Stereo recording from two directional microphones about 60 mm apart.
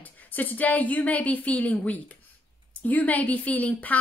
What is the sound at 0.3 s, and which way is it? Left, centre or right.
A woman's voice, left.